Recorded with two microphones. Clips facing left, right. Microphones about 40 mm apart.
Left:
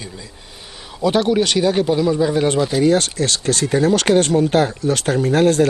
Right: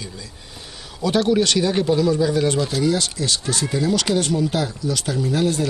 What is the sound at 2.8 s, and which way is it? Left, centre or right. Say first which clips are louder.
Speech: left 5 dB; left.